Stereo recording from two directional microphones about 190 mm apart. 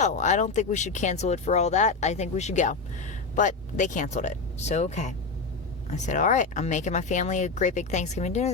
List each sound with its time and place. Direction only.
0.0 s speech: 40° left (ahead or behind)